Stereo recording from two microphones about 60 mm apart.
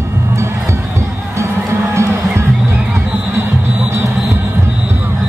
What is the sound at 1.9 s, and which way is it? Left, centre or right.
Music, right.